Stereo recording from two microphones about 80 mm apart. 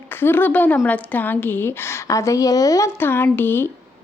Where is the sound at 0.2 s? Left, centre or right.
Left.